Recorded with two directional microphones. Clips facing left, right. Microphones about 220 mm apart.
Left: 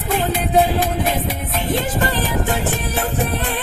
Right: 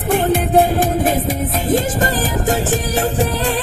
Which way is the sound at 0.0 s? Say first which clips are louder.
Right 5 dB; 50° right (ahead or behind).